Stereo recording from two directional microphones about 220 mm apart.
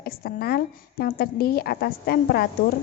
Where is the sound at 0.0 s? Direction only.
45° left (ahead or behind).